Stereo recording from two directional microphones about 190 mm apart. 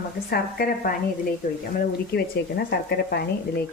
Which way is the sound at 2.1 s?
60° left (ahead or behind).